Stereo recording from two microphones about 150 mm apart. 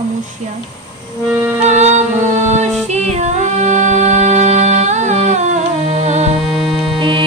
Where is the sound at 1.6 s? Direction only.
50° right (ahead or behind).